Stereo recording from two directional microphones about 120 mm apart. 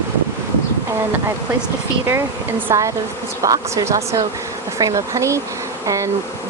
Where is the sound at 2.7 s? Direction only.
25° right (ahead or behind).